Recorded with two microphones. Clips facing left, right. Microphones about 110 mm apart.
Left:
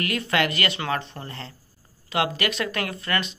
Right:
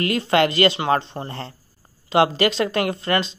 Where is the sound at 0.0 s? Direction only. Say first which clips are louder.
Right 6 dB; 30° right (ahead or behind).